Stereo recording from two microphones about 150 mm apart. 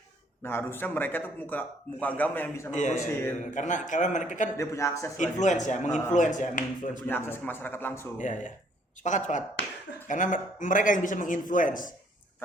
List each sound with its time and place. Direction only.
0.4 s a man's voice: 15° left (ahead or behind)
2.7 s a man's voice: 55° left (ahead or behind)
3.1 s a man's voice: 15° left (ahead or behind)
3.5 s a man's voice: 55° left (ahead or behind)
4.5 s speech: 20° left (ahead or behind)
5.1 s a man's voice: 55° left (ahead or behind)
7.1 s a man's voice: 15° left (ahead or behind)
8.2 s a man's voice: 55° left (ahead or behind)